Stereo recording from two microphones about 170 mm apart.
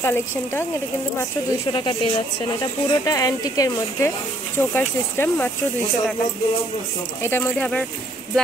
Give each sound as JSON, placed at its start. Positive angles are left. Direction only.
{"t": 0.0, "sound": "speech", "side_deg": 15}
{"t": 1.7, "sound": "speech", "side_deg": 30}
{"t": 7.2, "sound": "speech", "side_deg": 15}